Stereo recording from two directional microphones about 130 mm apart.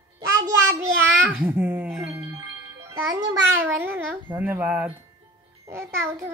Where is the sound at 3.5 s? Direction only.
15° right (ahead or behind).